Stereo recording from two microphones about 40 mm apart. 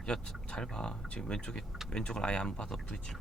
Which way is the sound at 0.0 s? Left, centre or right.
Left.